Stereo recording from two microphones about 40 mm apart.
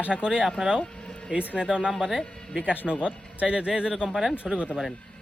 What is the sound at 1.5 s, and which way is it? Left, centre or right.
Speech, right.